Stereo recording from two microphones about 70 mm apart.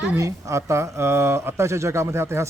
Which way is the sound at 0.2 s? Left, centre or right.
Right.